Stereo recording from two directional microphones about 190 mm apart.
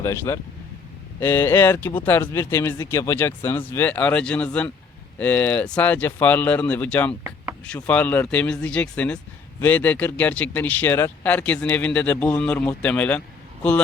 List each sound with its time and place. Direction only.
0.0 s speech: 15° left (ahead or behind)